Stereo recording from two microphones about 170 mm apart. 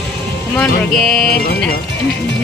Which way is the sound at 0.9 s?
60° left (ahead or behind).